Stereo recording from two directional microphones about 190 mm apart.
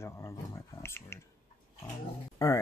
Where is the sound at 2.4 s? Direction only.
20° left (ahead or behind).